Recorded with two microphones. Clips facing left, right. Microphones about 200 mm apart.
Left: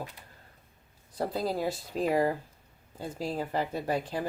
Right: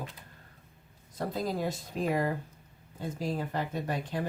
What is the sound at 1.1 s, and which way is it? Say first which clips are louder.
Speech: left 2 dB; 35° left (ahead or behind).